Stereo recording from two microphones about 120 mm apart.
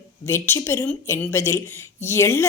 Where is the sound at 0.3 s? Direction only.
20° left (ahead or behind).